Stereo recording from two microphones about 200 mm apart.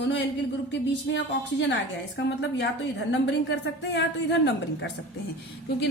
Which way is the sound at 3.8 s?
60° left (ahead or behind).